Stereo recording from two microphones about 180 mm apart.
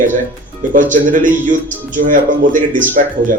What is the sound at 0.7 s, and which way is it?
Speech, 45° right (ahead or behind).